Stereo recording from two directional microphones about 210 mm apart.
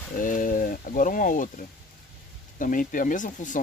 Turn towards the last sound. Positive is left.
turn(degrees=35)  # may be behind; listen again after turning